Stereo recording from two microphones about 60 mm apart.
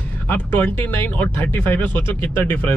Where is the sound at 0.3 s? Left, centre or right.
Left.